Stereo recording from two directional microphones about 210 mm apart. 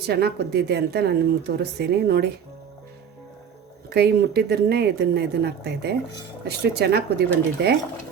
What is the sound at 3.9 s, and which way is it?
Speech, 50° right (ahead or behind).